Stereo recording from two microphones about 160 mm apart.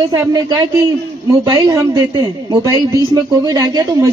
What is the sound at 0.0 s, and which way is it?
A man's voice, 20° right (ahead or behind).